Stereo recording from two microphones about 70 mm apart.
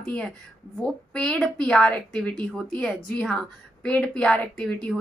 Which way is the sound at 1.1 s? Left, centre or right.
Centre.